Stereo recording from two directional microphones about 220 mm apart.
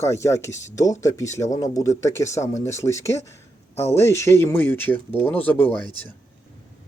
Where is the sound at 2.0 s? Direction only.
10° left (ahead or behind).